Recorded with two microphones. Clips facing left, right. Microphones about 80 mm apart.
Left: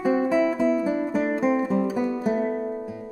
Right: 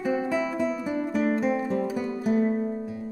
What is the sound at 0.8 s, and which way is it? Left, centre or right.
Music, centre.